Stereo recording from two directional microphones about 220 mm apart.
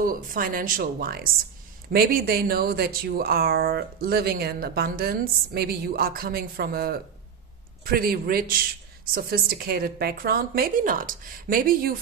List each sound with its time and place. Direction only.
0.0 s speech: 40° right (ahead or behind)